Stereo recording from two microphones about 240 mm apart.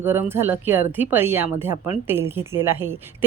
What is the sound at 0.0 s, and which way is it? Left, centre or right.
A woman's voice, centre.